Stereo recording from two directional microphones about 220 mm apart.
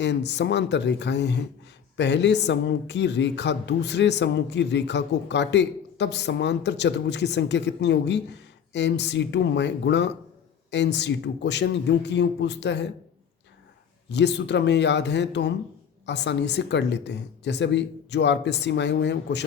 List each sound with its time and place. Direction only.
0.0 s speech: 50° left (ahead or behind)
14.1 s speech: 50° left (ahead or behind)